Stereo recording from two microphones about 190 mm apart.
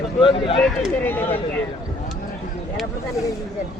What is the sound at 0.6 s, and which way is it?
Speech, centre (ahead or behind).